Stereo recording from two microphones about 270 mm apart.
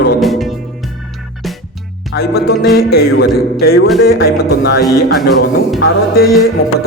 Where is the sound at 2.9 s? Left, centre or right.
Left.